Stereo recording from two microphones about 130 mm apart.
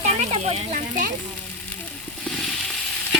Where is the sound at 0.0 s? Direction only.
55° right (ahead or behind).